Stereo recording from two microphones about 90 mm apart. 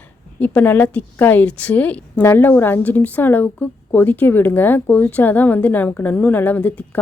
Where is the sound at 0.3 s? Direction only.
20° left (ahead or behind).